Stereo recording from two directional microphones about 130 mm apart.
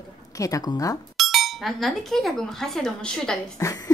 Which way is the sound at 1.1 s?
Centre (ahead or behind).